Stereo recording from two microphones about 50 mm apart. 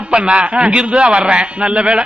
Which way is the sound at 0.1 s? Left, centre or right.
Right.